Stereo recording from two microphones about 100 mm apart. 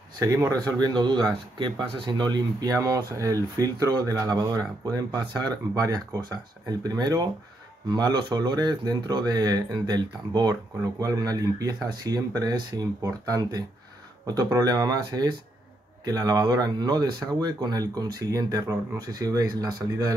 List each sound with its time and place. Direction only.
0.5 s speech: 40° right (ahead or behind)